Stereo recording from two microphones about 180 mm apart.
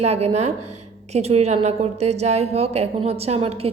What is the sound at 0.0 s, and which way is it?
A woman's voice, 35° right (ahead or behind).